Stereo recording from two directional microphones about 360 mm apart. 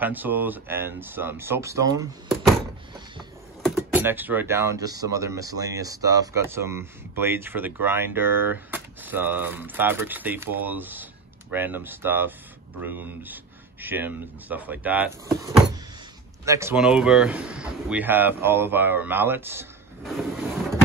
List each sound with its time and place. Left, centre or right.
0.0 s speech: centre
3.6 s speech: centre